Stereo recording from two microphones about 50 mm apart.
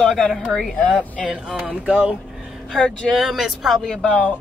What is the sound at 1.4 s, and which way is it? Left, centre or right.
Speech, centre.